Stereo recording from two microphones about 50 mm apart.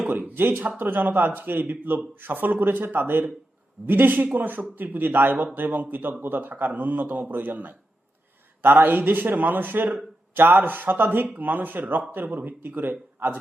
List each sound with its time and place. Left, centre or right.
0.3 s a man's voice: right